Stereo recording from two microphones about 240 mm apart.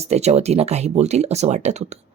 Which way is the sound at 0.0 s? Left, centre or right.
Right.